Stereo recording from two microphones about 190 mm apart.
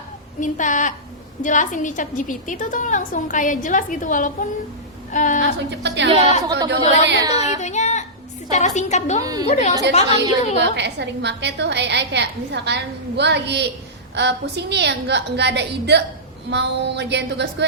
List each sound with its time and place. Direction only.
0.3 s a woman's voice: 40° left (ahead or behind)
5.4 s a woman's voice: 70° right (ahead or behind)
7.3 s music: 35° left (ahead or behind)
8.4 s a woman's voice: 40° left (ahead or behind)
10.8 s a woman's voice: 65° right (ahead or behind)